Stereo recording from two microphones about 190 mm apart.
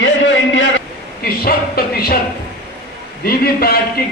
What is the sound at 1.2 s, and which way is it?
Speech, 55° left (ahead or behind).